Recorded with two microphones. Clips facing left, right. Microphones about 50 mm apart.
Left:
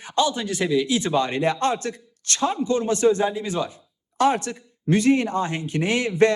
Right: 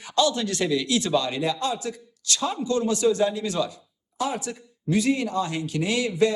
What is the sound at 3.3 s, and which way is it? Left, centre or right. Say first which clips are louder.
Speech: even; centre.